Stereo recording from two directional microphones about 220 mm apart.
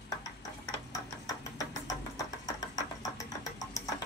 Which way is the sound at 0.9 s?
15° left (ahead or behind).